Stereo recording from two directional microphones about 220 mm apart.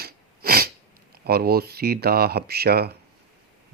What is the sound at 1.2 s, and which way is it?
Speech, 45° right (ahead or behind).